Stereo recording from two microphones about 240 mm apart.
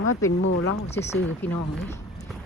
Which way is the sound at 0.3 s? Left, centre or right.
Left.